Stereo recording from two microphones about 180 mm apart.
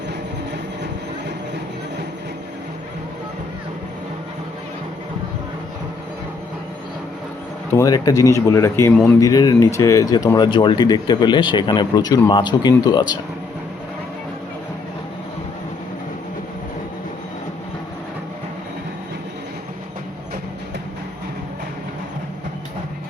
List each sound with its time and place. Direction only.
7.8 s speech: 20° left (ahead or behind)